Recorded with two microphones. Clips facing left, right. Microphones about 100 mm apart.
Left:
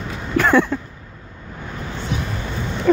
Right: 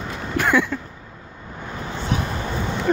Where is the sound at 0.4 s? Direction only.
35° left (ahead or behind).